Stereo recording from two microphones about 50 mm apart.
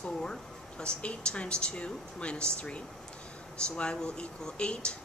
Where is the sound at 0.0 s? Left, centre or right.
Centre.